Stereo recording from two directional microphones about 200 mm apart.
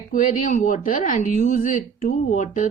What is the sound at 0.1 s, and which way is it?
Speech, 40° left (ahead or behind).